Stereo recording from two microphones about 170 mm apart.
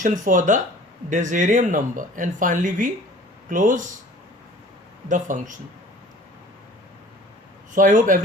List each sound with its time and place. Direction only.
0.0 s speech: 50° right (ahead or behind)
5.0 s speech: 50° right (ahead or behind)
7.8 s speech: 50° right (ahead or behind)